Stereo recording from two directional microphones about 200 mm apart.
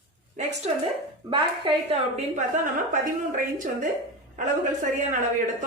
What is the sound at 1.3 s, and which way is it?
A woman's voice, 30° right (ahead or behind).